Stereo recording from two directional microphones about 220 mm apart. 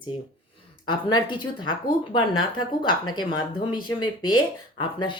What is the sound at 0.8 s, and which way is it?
Speech, 20° left (ahead or behind).